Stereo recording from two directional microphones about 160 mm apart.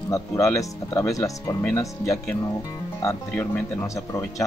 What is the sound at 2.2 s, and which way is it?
Speech, 10° left (ahead or behind).